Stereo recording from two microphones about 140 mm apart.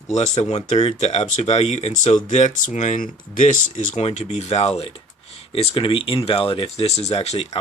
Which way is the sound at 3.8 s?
55° left (ahead or behind).